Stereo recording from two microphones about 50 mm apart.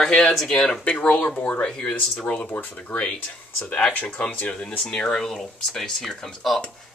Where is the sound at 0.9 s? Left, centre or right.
Left.